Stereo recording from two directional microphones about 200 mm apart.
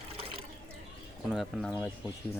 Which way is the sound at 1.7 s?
15° left (ahead or behind).